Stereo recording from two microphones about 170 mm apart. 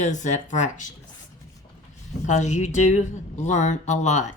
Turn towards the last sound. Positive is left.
turn(degrees=45)  # may be behind; listen again after turning